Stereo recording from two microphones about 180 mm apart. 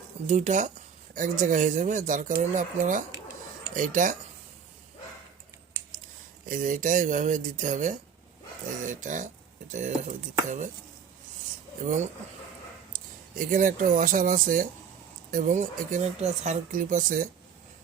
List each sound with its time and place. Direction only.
0.3 s speech: 40° right (ahead or behind)
6.4 s speech: 50° right (ahead or behind)
13.4 s speech: 50° right (ahead or behind)